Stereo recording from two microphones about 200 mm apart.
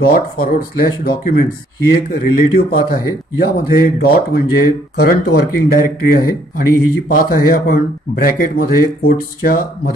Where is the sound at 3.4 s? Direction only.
50° left (ahead or behind).